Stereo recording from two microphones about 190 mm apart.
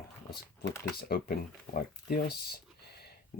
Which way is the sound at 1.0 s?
50° left (ahead or behind).